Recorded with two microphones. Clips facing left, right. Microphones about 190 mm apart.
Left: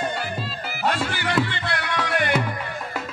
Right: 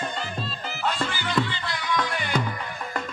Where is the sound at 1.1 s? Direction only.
65° left (ahead or behind).